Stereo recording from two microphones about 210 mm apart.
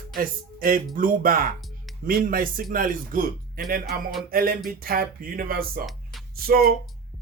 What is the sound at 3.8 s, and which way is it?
Speech, centre (ahead or behind).